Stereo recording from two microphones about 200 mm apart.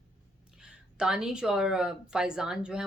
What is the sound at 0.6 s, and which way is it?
Speech, 5° right (ahead or behind).